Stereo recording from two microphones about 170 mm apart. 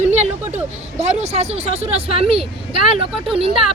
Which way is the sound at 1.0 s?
40° right (ahead or behind).